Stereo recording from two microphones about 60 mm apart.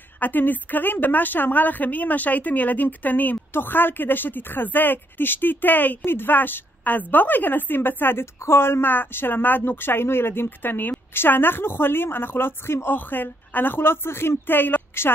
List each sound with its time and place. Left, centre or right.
0.2 s a woman's voice: left